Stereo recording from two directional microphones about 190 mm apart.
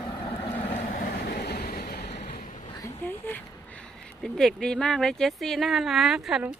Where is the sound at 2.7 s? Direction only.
15° left (ahead or behind).